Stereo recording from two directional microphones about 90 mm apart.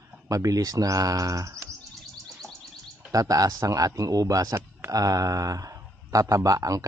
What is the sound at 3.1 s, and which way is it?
Speech, 40° right (ahead or behind).